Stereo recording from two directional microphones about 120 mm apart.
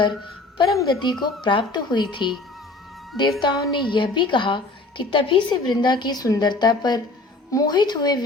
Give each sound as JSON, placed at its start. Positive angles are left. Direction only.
{"t": 0.5, "sound": "a woman's voice", "side_deg": 40}
{"t": 3.4, "sound": "a woman's voice", "side_deg": 40}